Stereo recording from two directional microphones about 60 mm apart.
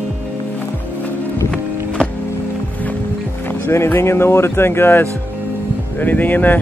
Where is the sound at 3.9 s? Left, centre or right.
Left.